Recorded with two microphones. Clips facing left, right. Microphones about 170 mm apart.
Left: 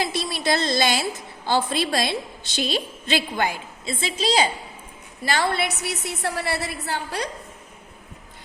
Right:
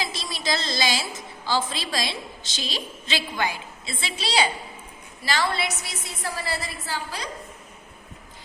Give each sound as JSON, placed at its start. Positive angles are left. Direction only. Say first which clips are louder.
{"t": 0.0, "sound": "a sound", "louder": "left 6 dB", "side_deg": 60}
{"t": 1.5, "sound": "a woman's voice", "louder": "left 4 dB", "side_deg": 60}
{"t": 5.2, "sound": "a woman's voice", "louder": "left 3 dB", "side_deg": 55}